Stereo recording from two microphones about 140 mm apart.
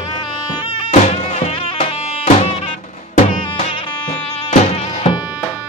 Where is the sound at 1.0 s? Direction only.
50° left (ahead or behind).